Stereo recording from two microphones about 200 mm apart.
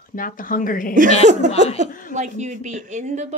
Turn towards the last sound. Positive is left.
turn(degrees=-35)  # may be behind; listen again after turning